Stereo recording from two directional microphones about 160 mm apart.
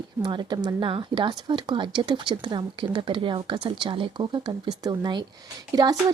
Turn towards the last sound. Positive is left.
turn(degrees=-25)  # may be behind; listen again after turning